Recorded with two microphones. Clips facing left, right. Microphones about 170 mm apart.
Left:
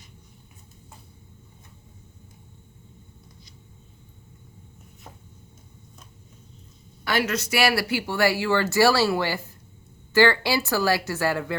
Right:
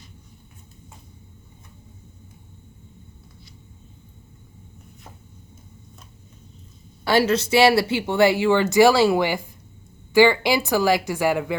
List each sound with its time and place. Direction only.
7.0 s speech: 30° right (ahead or behind)